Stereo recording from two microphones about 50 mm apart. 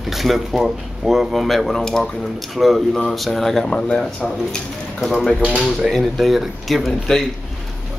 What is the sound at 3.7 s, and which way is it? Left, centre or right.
Speech, centre.